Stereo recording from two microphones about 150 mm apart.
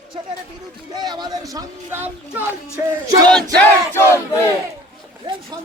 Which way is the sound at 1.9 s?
15° right (ahead or behind).